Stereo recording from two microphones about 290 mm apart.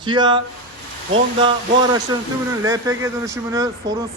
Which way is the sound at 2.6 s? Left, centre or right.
Centre.